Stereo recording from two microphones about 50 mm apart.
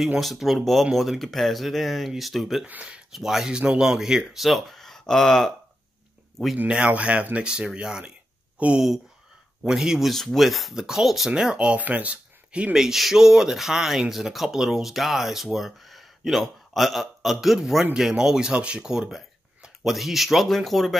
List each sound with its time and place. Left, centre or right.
0.2 s speech: centre
2.6 s speech: right
3.1 s speech: centre
3.4 s speech: centre
6.7 s speech: right
9.6 s speech: centre
11.2 s speech: centre
12.7 s speech: centre